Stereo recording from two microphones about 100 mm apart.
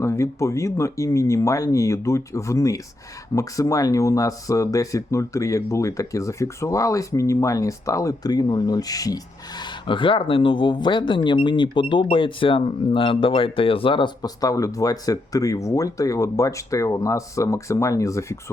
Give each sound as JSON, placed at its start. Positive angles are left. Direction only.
{"t": 0.0, "sound": "speech", "side_deg": 30}
{"t": 9.8, "sound": "speech", "side_deg": 55}
{"t": 14.2, "sound": "speech", "side_deg": 35}